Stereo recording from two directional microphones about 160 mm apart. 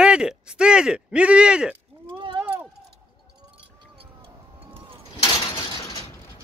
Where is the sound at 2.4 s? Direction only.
10° right (ahead or behind).